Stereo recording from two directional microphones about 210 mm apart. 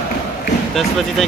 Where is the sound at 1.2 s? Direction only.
Centre (ahead or behind).